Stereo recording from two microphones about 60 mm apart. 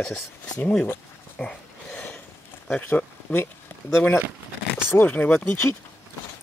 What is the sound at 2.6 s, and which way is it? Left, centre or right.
Speech, left.